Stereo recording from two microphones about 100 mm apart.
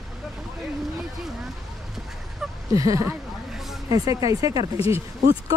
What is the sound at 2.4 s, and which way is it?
Fowl, 5° right (ahead or behind).